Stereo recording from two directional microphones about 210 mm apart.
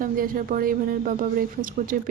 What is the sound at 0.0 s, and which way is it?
Speech, 40° right (ahead or behind).